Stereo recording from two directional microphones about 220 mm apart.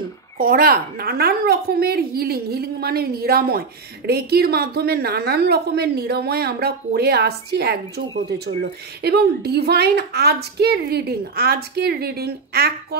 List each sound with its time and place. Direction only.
0.4 s a woman's voice: 40° right (ahead or behind)